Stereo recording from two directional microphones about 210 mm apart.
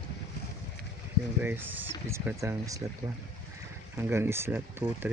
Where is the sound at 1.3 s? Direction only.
10° right (ahead or behind).